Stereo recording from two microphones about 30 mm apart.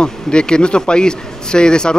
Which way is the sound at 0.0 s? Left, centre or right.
Left.